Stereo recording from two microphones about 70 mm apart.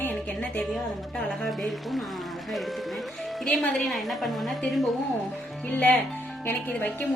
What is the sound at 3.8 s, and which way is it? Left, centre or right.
A woman's voice, centre.